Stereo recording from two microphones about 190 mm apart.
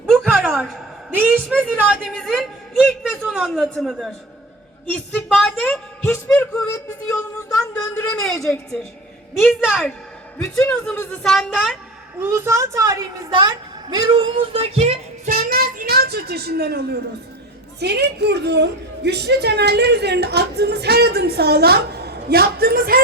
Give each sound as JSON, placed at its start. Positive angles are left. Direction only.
{"t": 0.1, "sound": "a sound", "side_deg": 0}
{"t": 1.6, "sound": "speech", "side_deg": -5}
{"t": 2.1, "sound": "a sound", "side_deg": 0}
{"t": 3.3, "sound": "speech", "side_deg": 0}
{"t": 9.4, "sound": "speech", "side_deg": 0}
{"t": 10.3, "sound": "speech", "side_deg": 15}
{"t": 11.2, "sound": "speech", "side_deg": 0}
{"t": 12.2, "sound": "a woman's voice", "side_deg": -15}
{"t": 15.3, "sound": "a child's voice", "side_deg": -50}